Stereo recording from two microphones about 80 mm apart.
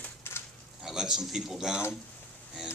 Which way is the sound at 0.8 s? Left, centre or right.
Centre.